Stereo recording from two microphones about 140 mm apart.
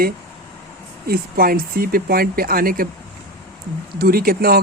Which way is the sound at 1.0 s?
90° right.